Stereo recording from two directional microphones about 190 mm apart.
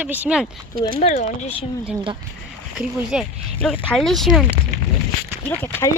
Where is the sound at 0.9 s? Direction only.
35° left (ahead or behind).